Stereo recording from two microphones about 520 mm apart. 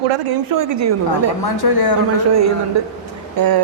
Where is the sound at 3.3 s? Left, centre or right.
Right.